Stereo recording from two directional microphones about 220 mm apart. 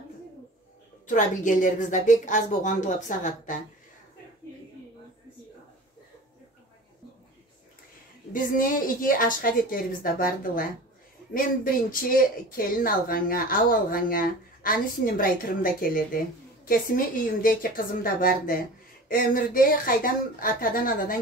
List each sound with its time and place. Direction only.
1.0 s speech: 35° left (ahead or behind)
8.3 s speech: 40° left (ahead or behind)